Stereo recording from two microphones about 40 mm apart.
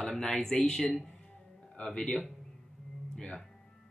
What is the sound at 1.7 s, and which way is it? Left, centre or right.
Speech, left.